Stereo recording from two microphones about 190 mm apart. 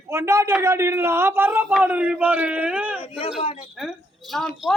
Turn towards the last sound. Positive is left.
turn(degrees=0)  # may be behind; listen again after turning